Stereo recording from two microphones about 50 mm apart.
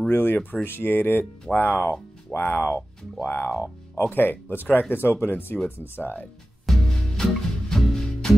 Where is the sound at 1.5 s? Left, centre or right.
Left.